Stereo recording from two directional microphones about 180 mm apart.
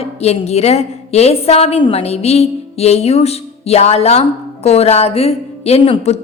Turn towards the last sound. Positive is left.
turn(degrees=35)  # may be behind; listen again after turning